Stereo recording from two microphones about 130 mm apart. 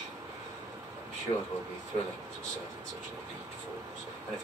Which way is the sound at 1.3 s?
50° left (ahead or behind).